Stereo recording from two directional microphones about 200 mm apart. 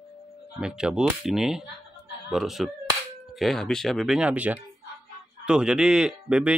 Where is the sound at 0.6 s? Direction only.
5° right (ahead or behind).